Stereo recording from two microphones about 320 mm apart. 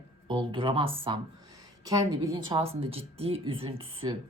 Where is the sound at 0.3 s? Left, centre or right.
Centre.